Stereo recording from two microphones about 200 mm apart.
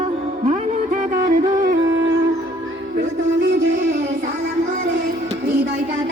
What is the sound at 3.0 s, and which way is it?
Music, 60° right (ahead or behind).